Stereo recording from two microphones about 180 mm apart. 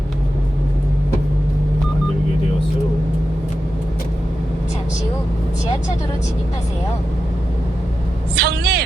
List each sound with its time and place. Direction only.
8.4 s vehicle: 65° right (ahead or behind)